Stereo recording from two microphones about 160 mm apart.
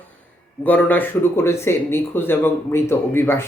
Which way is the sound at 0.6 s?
10° left (ahead or behind).